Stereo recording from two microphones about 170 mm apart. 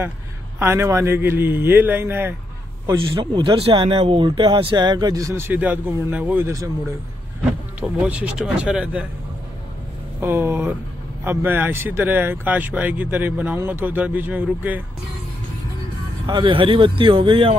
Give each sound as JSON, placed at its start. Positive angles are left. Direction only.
{"t": 0.6, "sound": "speech", "side_deg": -15}
{"t": 2.9, "sound": "speech", "side_deg": -25}
{"t": 7.8, "sound": "speech", "side_deg": -5}
{"t": 10.2, "sound": "speech", "side_deg": -15}
{"t": 16.3, "sound": "speech", "side_deg": -30}